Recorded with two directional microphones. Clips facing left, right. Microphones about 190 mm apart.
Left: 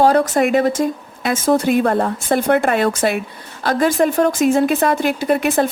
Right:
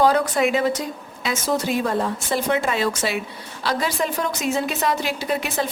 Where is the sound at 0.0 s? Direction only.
45° left (ahead or behind).